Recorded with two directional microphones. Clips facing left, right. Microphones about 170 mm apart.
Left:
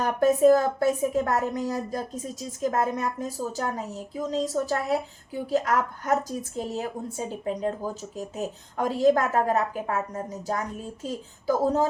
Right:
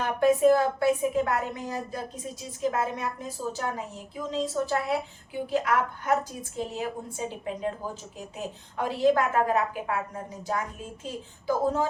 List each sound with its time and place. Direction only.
0.0 s a woman's voice: 40° left (ahead or behind)